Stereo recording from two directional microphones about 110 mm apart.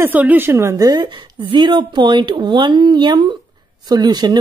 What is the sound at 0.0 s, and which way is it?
A woman's voice, 15° right (ahead or behind).